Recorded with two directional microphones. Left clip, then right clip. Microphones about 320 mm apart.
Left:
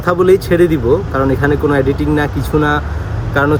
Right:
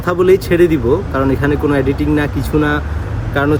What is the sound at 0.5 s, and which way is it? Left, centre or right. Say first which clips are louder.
Speech: even; left.